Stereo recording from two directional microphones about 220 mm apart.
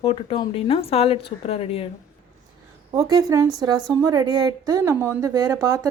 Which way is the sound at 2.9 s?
15° right (ahead or behind).